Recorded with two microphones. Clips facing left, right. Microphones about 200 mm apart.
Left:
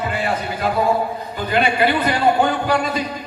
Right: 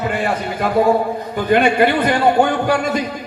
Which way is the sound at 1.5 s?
50° right (ahead or behind).